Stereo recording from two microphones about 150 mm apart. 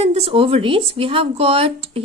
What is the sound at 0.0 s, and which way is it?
Speech, 40° right (ahead or behind).